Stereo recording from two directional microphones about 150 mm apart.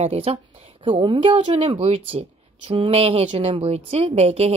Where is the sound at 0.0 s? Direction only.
45° right (ahead or behind).